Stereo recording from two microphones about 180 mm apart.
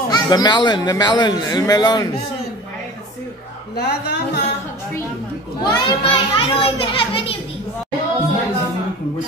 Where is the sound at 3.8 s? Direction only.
70° left (ahead or behind).